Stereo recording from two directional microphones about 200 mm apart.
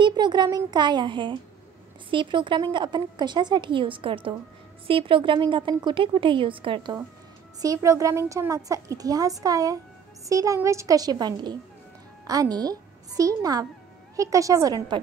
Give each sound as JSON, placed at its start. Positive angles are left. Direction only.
{"t": 0.0, "sound": "a woman's voice", "side_deg": -20}